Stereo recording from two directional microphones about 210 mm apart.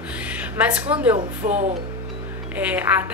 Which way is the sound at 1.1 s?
35° right (ahead or behind).